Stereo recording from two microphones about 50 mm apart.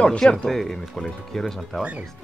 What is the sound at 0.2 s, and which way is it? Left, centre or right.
Speech, centre.